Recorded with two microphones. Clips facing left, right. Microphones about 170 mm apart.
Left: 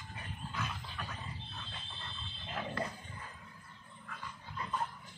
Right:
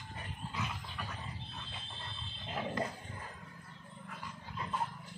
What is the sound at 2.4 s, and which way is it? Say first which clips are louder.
Dog: right 2 dB; 20° right (ahead or behind).